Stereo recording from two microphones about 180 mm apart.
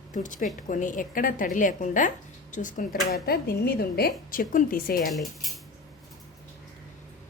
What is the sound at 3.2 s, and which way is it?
A woman's voice, 60° left (ahead or behind).